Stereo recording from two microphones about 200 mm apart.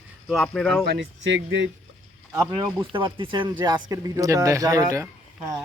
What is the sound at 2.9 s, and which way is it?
A man's voice, 25° right (ahead or behind).